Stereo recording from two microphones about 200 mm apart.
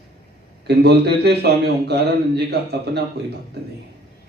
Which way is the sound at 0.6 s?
55° right (ahead or behind).